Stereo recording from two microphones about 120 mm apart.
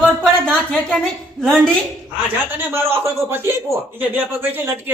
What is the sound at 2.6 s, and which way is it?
A man's voice, 20° right (ahead or behind).